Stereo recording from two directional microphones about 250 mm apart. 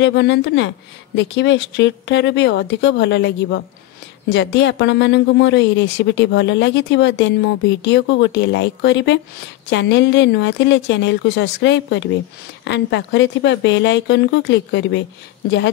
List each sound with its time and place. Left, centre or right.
0.0 s speech: left